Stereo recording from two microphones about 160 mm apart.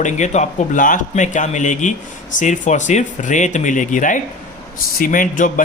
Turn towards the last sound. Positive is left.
turn(degrees=55)  # may be behind; listen again after turning